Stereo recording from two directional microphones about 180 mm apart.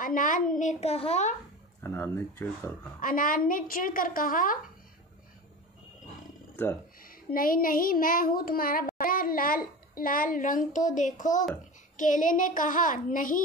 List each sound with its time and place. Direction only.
0.0 s a woman's voice: 50° left (ahead or behind)
1.8 s speech: 15° left (ahead or behind)
3.0 s a woman's voice: 50° left (ahead or behind)
7.0 s child singing: 50° left (ahead or behind)
12.0 s a woman's voice: 45° left (ahead or behind)